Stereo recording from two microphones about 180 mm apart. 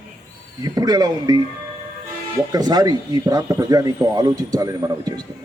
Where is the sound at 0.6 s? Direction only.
20° right (ahead or behind).